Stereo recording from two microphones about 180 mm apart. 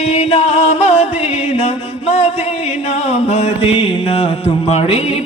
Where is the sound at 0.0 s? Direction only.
40° left (ahead or behind).